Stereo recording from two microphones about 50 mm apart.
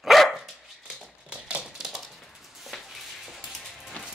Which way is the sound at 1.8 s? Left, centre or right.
Centre.